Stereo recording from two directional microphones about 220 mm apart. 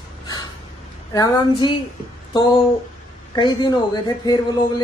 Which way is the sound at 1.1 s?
20° left (ahead or behind).